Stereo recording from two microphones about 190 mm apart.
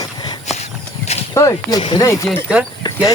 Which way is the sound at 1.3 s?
20° left (ahead or behind).